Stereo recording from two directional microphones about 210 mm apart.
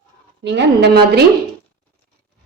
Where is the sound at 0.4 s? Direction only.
55° right (ahead or behind).